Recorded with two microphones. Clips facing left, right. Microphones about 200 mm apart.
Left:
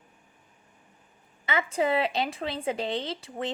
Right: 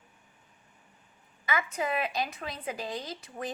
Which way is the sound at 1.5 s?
25° left (ahead or behind).